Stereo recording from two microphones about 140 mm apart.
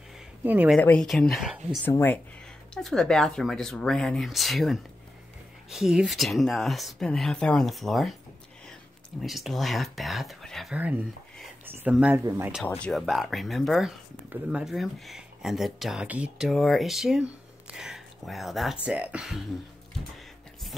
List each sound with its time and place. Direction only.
0.4 s speech: 15° right (ahead or behind)
0.7 s speech: 10° left (ahead or behind)
1.9 s speech: 15° left (ahead or behind)
2.7 s speech: 5° left (ahead or behind)
9.2 s speech: centre (ahead or behind)
11.6 s speech: 15° right (ahead or behind)